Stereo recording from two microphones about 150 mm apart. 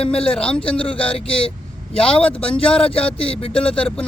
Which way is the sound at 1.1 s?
40° left (ahead or behind).